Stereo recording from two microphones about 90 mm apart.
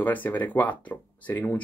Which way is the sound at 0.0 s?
20° left (ahead or behind).